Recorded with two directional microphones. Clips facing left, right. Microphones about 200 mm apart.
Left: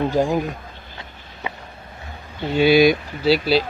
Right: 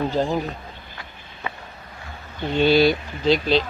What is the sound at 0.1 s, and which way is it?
Speech, 10° left (ahead or behind).